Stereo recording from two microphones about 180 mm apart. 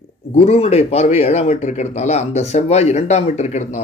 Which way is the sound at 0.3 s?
35° left (ahead or behind).